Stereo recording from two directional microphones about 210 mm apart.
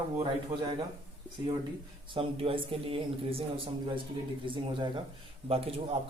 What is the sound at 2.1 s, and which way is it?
A man's voice, 25° right (ahead or behind).